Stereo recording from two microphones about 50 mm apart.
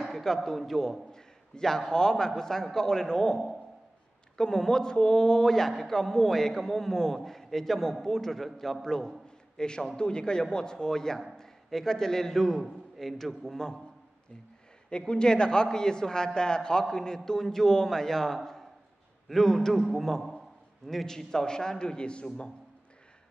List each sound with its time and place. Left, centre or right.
0.0 s a man's voice: centre
4.4 s a man's voice: centre
14.9 s a man's voice: centre